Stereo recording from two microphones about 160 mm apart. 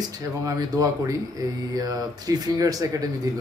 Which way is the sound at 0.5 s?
20° right (ahead or behind).